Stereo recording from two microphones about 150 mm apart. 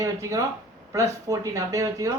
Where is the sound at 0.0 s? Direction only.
20° right (ahead or behind).